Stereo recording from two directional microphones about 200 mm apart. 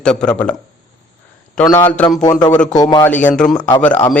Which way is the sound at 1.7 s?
10° left (ahead or behind).